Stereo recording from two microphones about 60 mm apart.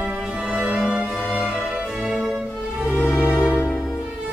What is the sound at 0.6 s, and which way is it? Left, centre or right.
Music, centre.